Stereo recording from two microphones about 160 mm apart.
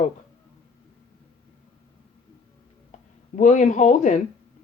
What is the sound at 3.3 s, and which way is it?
Speech, 50° left (ahead or behind).